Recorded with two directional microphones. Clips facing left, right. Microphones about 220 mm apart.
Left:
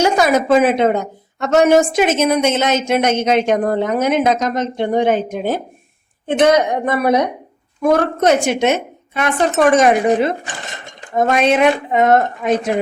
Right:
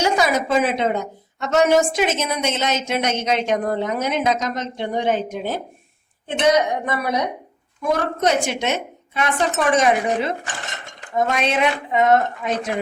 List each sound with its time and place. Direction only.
0.0 s a woman's voice: 50° left (ahead or behind)